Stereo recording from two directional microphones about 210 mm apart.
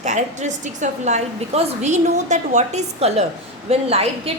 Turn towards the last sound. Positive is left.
turn(degrees=-30)  # may be behind; listen again after turning